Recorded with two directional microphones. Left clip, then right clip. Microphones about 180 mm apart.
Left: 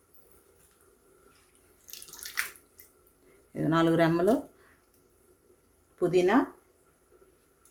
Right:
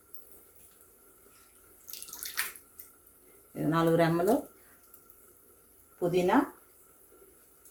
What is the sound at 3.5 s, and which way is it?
Speech, 40° left (ahead or behind).